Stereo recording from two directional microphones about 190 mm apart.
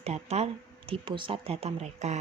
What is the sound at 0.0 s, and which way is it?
A woman's voice, 35° right (ahead or behind).